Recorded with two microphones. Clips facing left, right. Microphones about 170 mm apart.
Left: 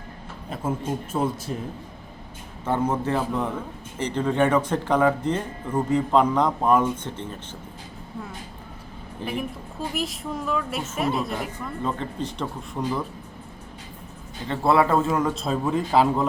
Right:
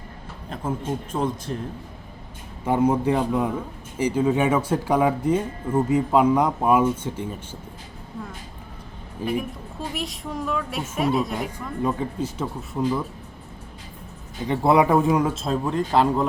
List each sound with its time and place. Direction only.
1.1 s speech: 5° left (ahead or behind)
2.6 s speech: 10° right (ahead or behind)
9.2 s a woman's voice: 10° right (ahead or behind)
11.8 s speech: 10° right (ahead or behind)
14.4 s speech: 15° right (ahead or behind)
15.4 s a woman's voice: centre (ahead or behind)